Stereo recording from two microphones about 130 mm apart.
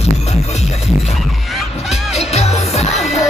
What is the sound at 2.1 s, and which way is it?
Music, 55° left (ahead or behind).